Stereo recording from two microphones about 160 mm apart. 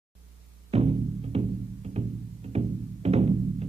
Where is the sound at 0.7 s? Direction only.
40° right (ahead or behind).